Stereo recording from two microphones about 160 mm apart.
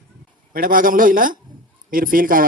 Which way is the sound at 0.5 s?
60° right (ahead or behind).